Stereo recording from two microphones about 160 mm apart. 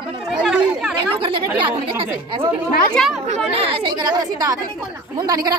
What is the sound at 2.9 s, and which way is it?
Speech, centre (ahead or behind).